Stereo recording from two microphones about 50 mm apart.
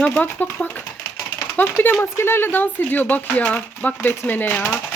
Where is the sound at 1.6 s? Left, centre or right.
Left.